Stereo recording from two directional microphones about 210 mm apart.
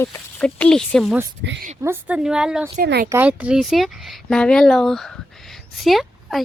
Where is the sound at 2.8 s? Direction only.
45° right (ahead or behind).